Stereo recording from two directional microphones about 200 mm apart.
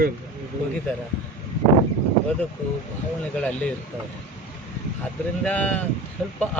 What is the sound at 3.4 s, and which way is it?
Speech, 5° left (ahead or behind).